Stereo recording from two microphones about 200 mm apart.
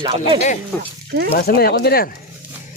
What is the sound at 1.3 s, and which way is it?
Speech, 50° left (ahead or behind).